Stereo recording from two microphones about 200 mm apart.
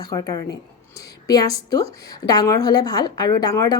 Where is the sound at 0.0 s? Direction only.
20° left (ahead or behind).